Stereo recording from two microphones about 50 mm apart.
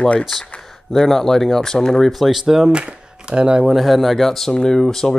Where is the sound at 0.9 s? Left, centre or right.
Centre.